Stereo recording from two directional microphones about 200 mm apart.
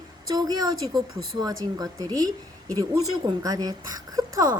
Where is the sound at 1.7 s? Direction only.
20° right (ahead or behind).